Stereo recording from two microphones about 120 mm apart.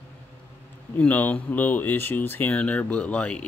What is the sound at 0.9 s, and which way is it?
Speech, 15° left (ahead or behind).